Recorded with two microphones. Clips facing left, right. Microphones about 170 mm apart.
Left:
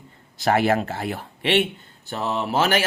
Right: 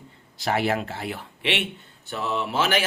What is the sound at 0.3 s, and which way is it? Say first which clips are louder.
Speech: left 5 dB; 50° left (ahead or behind).